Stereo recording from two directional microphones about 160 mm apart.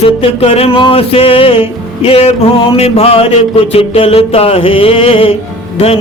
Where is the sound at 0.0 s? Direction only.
40° left (ahead or behind).